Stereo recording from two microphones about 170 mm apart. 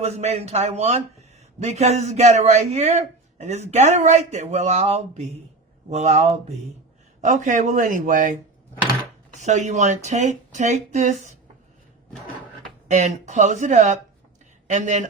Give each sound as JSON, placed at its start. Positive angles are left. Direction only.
{"t": 0.0, "sound": "a man's voice", "side_deg": -40}
{"t": 12.9, "sound": "speech", "side_deg": -45}